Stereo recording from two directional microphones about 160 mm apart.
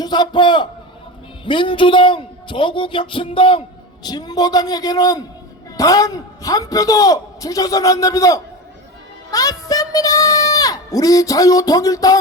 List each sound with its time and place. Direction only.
0.0 s a child's voice: 25° left (ahead or behind)